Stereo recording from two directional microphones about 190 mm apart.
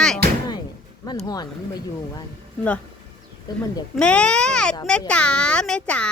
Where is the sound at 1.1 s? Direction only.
20° left (ahead or behind).